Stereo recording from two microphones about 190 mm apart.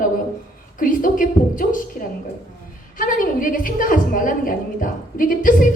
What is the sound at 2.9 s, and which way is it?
A woman's voice, 45° left (ahead or behind).